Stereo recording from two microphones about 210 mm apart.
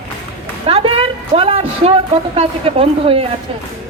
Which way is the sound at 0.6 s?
25° right (ahead or behind).